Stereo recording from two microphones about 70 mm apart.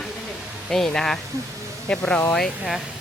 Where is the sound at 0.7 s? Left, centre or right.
Centre.